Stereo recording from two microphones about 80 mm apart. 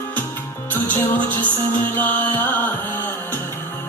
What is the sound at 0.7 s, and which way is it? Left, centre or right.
Music, left.